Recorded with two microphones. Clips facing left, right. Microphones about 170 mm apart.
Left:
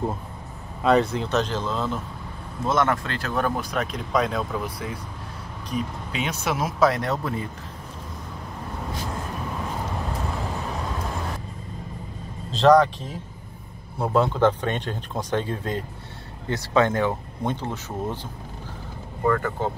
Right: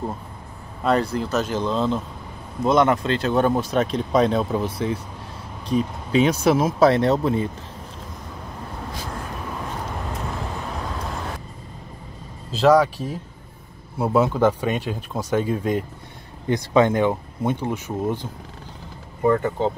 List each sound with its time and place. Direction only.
0.8 s speech: centre (ahead or behind); by 7.4 s 25° right (ahead or behind)
12.5 s speech: 5° right (ahead or behind)
19.2 s speech: 20° right (ahead or behind)